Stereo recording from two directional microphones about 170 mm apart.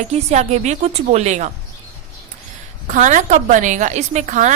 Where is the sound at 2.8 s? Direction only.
50° right (ahead or behind).